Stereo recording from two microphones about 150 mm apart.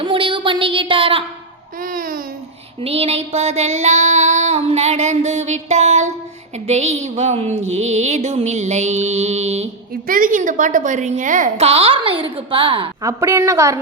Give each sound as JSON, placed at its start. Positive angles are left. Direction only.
{"t": 0.0, "sound": "a sound", "side_deg": -35}
{"t": 1.8, "sound": "babbling", "side_deg": -65}
{"t": 2.8, "sound": "child singing", "side_deg": -40}
{"t": 10.1, "sound": "child singing", "side_deg": -65}
{"t": 13.0, "sound": "a woman's voice", "side_deg": -20}